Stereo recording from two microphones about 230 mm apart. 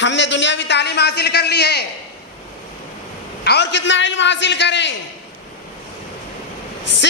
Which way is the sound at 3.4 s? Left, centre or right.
Left.